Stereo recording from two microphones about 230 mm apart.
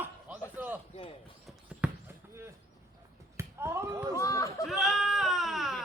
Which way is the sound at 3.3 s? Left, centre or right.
Centre.